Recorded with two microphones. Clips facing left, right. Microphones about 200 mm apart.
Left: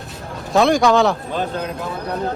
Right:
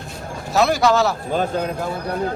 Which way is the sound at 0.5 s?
5° right (ahead or behind).